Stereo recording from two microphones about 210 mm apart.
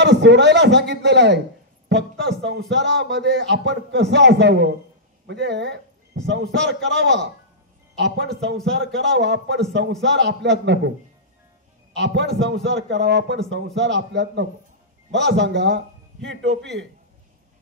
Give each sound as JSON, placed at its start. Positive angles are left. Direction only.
{"t": 0.0, "sound": "a man's voice", "side_deg": -55}
{"t": 11.9, "sound": "a man's voice", "side_deg": -55}